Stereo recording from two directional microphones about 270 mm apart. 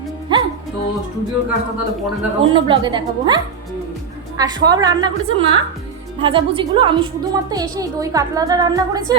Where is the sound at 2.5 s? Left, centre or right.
Centre.